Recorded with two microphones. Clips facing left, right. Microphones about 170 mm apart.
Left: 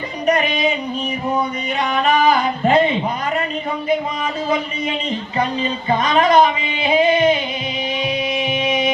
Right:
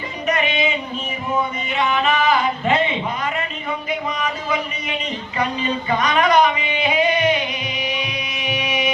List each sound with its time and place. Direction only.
0.3 s music: 35° left (ahead or behind)
1.8 s a sound: 40° left (ahead or behind)
3.8 s music: 30° left (ahead or behind)